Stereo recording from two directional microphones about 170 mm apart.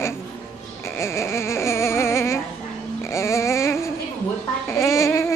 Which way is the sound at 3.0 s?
15° left (ahead or behind).